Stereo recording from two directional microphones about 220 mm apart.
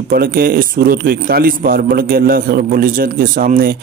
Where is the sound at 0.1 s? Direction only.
40° right (ahead or behind).